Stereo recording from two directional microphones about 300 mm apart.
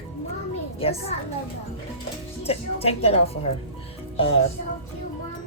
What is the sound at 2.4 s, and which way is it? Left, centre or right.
A woman's voice, centre.